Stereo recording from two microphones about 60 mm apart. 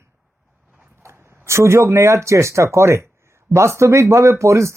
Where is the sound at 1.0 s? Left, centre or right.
Right.